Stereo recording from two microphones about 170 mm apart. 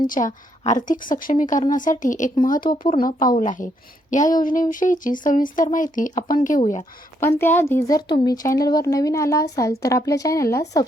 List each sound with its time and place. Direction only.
0.1 s a woman's voice: 50° left (ahead or behind)
7.2 s speech: 15° left (ahead or behind)